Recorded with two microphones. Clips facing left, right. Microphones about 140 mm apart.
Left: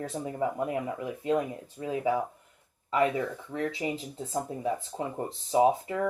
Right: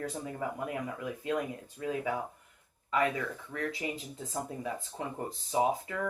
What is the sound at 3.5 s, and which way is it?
Speech, 25° left (ahead or behind).